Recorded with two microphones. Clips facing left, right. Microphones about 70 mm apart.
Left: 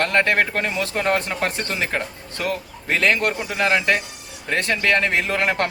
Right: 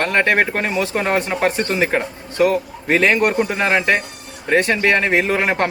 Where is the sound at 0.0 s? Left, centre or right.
Centre.